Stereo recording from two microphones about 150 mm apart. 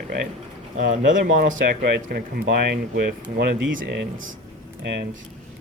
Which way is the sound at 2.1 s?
90° right.